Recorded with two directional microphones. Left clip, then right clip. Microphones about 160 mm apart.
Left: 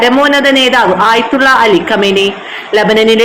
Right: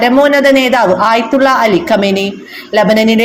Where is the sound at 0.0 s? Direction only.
40° right (ahead or behind).